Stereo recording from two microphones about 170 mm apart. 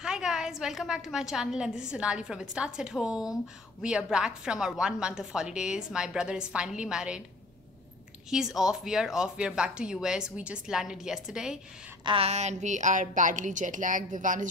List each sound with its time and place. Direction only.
0.0 s a woman's voice: 5° right (ahead or behind)
8.3 s a woman's voice: 5° right (ahead or behind)
12.0 s a woman's voice: 30° right (ahead or behind); by 14.5 s 50° right (ahead or behind)